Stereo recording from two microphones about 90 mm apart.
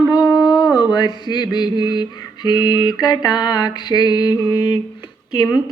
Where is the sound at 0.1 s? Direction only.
50° left (ahead or behind).